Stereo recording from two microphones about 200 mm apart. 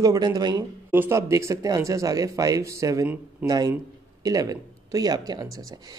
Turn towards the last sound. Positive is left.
turn(degrees=-20)  # may be behind; listen again after turning